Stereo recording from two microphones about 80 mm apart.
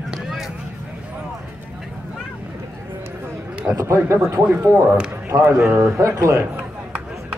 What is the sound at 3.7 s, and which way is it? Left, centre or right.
Speech, right.